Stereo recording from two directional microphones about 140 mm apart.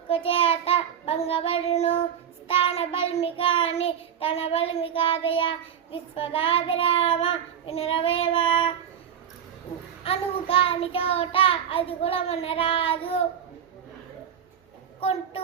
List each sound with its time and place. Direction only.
0.1 s child singing: 40° left (ahead or behind)
10.0 s child singing: 40° left (ahead or behind)